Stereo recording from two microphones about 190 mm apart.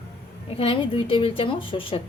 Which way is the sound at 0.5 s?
30° left (ahead or behind).